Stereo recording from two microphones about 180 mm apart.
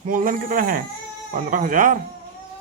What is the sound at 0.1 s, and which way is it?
Speech, 50° right (ahead or behind).